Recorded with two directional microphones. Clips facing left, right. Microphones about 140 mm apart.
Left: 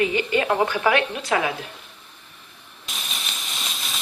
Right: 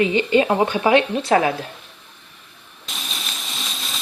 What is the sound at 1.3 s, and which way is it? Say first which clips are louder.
Speech: right 6 dB; 40° right (ahead or behind).